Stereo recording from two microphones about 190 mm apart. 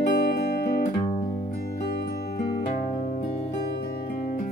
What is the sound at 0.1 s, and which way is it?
Guitar, 55° left (ahead or behind).